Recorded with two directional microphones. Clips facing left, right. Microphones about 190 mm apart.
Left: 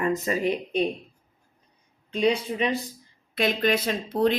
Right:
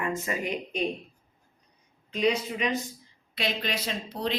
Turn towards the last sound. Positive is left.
turn(degrees=55)  # may be behind; listen again after turning